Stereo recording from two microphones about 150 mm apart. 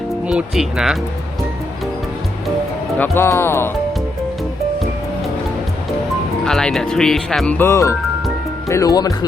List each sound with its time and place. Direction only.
0.3 s speech: 5° right (ahead or behind)
3.0 s speech: 15° left (ahead or behind)
6.4 s speech: 5° left (ahead or behind); by 9.1 s 25° left (ahead or behind)